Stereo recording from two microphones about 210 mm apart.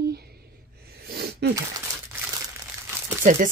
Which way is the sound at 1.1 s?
50° right (ahead or behind).